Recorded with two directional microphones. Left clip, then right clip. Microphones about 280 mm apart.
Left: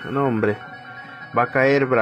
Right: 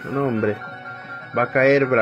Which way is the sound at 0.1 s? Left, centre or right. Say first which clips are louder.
Left 1 dB; centre.